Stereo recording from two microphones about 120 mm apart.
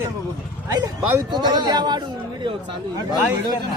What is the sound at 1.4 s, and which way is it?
Speech, 40° right (ahead or behind).